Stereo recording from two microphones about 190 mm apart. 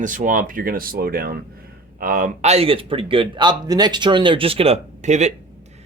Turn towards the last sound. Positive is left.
turn(degrees=-35)  # may be behind; listen again after turning